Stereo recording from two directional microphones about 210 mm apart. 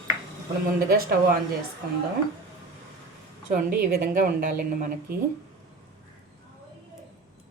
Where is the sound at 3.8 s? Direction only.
45° right (ahead or behind).